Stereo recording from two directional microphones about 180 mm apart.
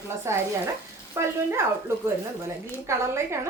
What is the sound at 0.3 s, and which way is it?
Speech, 15° right (ahead or behind).